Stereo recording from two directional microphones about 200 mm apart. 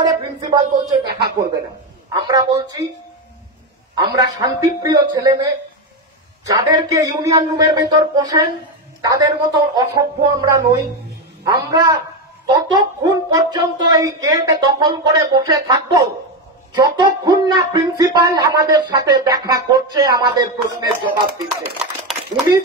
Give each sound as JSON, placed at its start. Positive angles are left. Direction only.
{"t": 0.0, "sound": "speech", "side_deg": -20}
{"t": 2.1, "sound": "speech", "side_deg": -20}
{"t": 3.9, "sound": "speech", "side_deg": -20}